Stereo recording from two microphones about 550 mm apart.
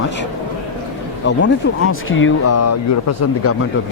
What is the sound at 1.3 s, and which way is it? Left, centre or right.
Speech, centre.